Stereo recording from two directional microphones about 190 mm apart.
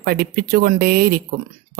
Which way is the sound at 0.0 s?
55° right (ahead or behind).